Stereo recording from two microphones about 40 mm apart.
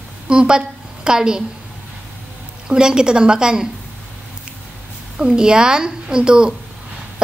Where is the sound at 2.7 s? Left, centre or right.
Centre.